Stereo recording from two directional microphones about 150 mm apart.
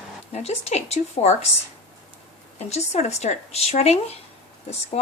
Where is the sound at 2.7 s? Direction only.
50° left (ahead or behind).